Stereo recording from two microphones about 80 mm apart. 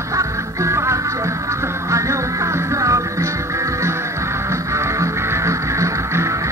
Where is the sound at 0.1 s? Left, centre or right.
Right.